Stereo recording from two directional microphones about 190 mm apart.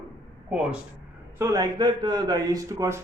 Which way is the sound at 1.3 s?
15° right (ahead or behind).